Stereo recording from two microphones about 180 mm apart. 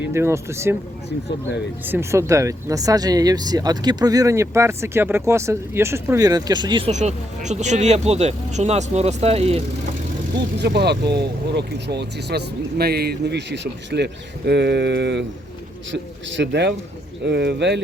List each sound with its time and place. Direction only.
0.1 s speech: 15° right (ahead or behind)
1.8 s speech: 15° right (ahead or behind)
6.9 s speech: 40° right (ahead or behind)
10.3 s speech: 70° right (ahead or behind)
16.3 s speech: 75° right (ahead or behind)